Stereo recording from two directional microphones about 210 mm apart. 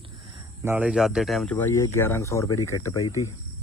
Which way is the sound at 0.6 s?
5° right (ahead or behind).